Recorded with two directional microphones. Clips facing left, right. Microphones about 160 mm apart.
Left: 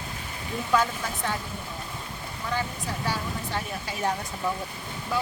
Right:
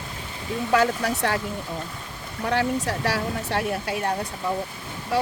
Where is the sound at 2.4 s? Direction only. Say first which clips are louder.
Right 8 dB; 75° right (ahead or behind).